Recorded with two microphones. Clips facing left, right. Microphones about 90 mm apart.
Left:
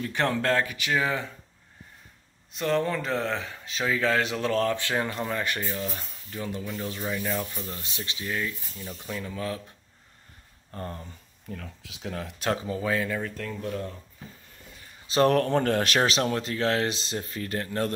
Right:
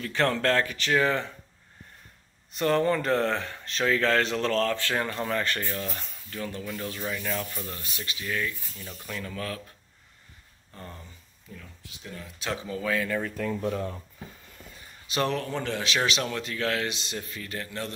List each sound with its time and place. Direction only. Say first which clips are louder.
0.0 s speech: right 1 dB; 15° left (ahead or behind)
2.5 s speech: right 2 dB; centre (ahead or behind); by 8.8 s 25° left (ahead or behind)
9.1 s speech: left 2 dB; 15° left (ahead or behind)
10.7 s speech: left 7 dB; 45° left (ahead or behind)
11.5 s speech: left 5 dB; 80° left
12.6 s speech: left 1 dB; 30° left (ahead or behind)
13.5 s speech: right 4 dB; 25° right (ahead or behind)
15.2 s speech: left 9 dB; 50° left (ahead or behind)
16.0 s speech: left 3 dB; 35° left (ahead or behind)